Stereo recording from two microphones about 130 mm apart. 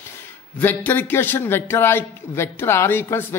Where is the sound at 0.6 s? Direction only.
15° left (ahead or behind).